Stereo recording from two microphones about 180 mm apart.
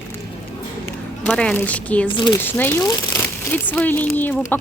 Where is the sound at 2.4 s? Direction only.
10° left (ahead or behind).